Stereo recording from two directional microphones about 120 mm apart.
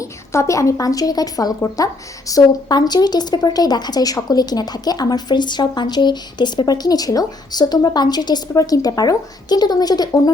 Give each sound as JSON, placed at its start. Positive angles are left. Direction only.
{"t": 0.0, "sound": "a woman's voice", "side_deg": 25}